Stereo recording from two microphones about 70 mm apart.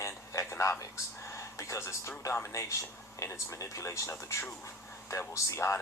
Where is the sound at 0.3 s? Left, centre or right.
Left.